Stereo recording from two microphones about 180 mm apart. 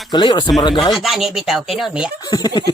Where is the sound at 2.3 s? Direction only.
20° left (ahead or behind).